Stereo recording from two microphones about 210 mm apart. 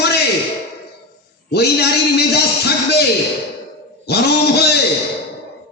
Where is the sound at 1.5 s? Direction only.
50° left (ahead or behind).